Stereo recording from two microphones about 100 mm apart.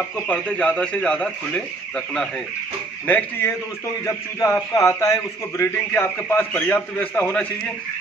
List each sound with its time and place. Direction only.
0.3 s speech: 10° left (ahead or behind)
4.0 s a man's voice: 30° left (ahead or behind)